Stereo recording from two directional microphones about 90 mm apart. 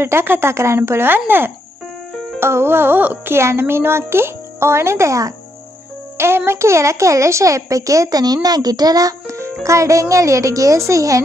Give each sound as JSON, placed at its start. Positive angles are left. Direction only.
{"t": 0.0, "sound": "speech", "side_deg": -25}